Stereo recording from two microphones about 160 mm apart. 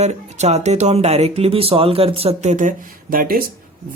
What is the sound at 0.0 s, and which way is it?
Speech, 45° right (ahead or behind).